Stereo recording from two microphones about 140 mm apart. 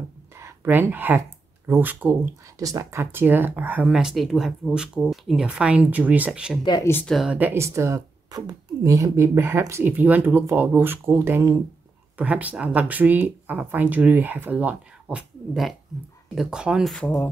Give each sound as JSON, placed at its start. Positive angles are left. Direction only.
{"t": 0.4, "sound": "a woman's voice", "side_deg": -15}
{"t": 2.6, "sound": "a woman's voice", "side_deg": -20}
{"t": 6.6, "sound": "speech", "side_deg": 30}
{"t": 6.9, "sound": "a woman's voice", "side_deg": 15}
{"t": 7.2, "sound": "a woman's voice", "side_deg": -10}